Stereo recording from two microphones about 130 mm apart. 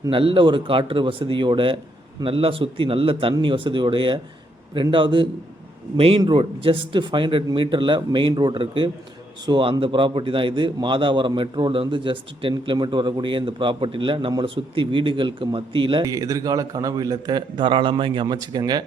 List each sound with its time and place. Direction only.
0.1 s a man's voice: 40° right (ahead or behind)
16.0 s a man's voice: 25° right (ahead or behind)